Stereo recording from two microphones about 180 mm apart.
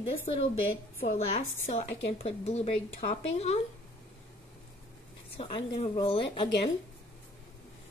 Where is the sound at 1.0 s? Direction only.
40° left (ahead or behind).